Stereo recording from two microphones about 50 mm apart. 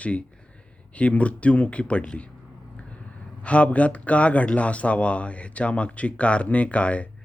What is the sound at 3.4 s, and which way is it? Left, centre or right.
Speech, left.